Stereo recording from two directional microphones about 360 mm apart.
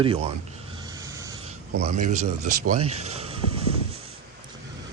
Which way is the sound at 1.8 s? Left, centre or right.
Centre.